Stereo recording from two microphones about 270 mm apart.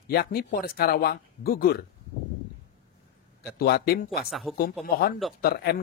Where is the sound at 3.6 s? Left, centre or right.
Left.